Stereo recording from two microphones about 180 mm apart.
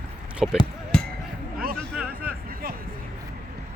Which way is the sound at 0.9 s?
5° left (ahead or behind).